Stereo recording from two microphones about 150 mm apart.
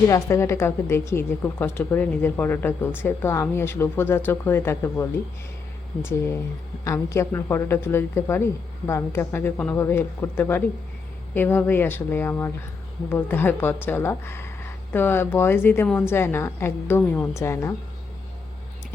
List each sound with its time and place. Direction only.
0.1 s a woman's voice: 20° left (ahead or behind)